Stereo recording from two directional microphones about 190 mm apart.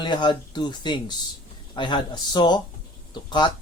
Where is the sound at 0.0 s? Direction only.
25° left (ahead or behind).